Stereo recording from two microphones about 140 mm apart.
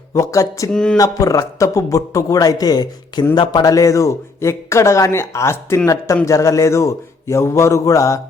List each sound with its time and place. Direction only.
0.1 s a man's voice: 25° left (ahead or behind)
0.7 s speech: 5° left (ahead or behind)
0.9 s a man's voice: 25° left (ahead or behind)